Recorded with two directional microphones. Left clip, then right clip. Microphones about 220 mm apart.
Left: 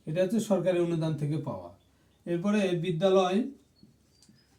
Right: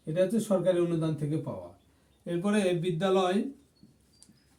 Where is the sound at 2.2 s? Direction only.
20° right (ahead or behind).